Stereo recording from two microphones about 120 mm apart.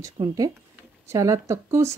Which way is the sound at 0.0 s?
30° right (ahead or behind).